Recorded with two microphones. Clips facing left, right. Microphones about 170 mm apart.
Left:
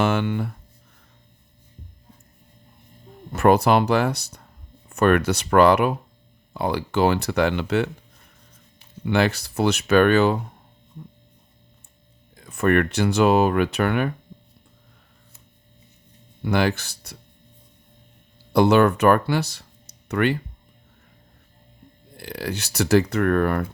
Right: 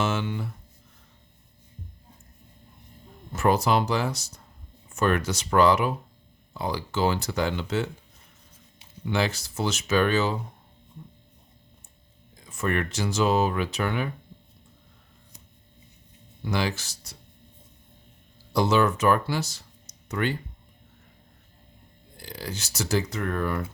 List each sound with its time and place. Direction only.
0.0 s speech: 60° left (ahead or behind)
3.3 s speech: 60° left (ahead or behind)
9.0 s speech: 60° left (ahead or behind)
12.4 s speech: 60° left (ahead or behind)
16.4 s speech: 60° left (ahead or behind)
18.5 s speech: 60° left (ahead or behind)
22.2 s speech: 65° left (ahead or behind)